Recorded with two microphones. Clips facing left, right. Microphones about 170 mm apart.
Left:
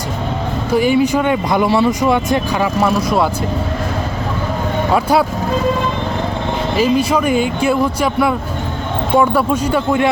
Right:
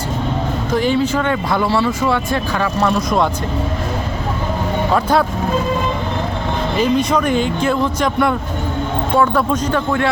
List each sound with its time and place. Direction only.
0.7 s speech: 10° left (ahead or behind)
2.8 s speech: 5° left (ahead or behind)
6.7 s speech: 5° left (ahead or behind)